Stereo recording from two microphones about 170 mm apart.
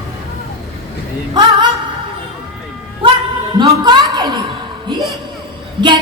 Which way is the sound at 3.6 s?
25° right (ahead or behind).